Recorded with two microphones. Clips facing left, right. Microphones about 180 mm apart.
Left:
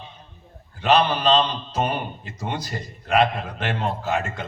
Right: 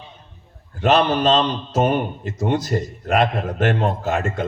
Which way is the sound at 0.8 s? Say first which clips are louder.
Right 3 dB; 45° right (ahead or behind).